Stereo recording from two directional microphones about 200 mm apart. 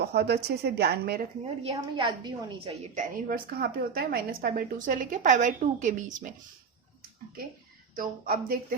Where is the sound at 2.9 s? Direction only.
40° right (ahead or behind).